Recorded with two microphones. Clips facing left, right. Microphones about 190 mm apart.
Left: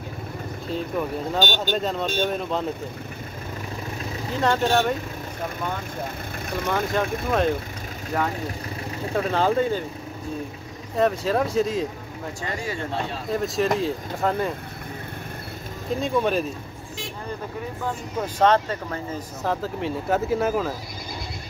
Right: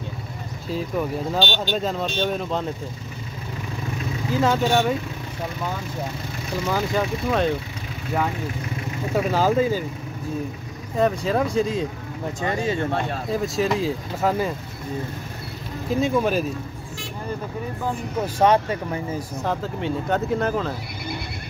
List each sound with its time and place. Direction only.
0.7 s speech: 5° right (ahead or behind)
1.4 s speech: 45° left (ahead or behind)
1.8 s speech: centre (ahead or behind)
4.4 s speech: centre (ahead or behind)
6.6 s speech: centre (ahead or behind)
9.1 s speech: 5° right (ahead or behind)
11.0 s speech: centre (ahead or behind)
12.4 s speech: 25° right (ahead or behind)
13.3 s speech: centre (ahead or behind)
15.9 s speech: centre (ahead or behind)
17.8 s speech: 10° right (ahead or behind)
19.4 s speech: centre (ahead or behind)